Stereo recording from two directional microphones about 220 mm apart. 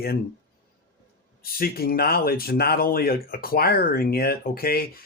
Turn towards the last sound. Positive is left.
turn(degrees=45)  # may be behind; listen again after turning